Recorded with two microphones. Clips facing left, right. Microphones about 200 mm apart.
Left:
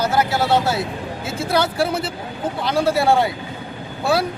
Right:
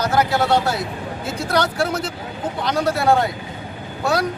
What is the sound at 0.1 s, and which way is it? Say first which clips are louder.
Speech: right 1 dB; 30° left (ahead or behind).